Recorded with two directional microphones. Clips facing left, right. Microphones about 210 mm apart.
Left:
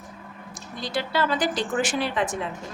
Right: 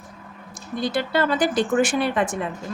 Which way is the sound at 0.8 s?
50° right (ahead or behind).